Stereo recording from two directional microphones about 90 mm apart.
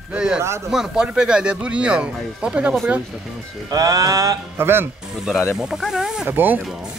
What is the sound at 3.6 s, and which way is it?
Music, 40° right (ahead or behind).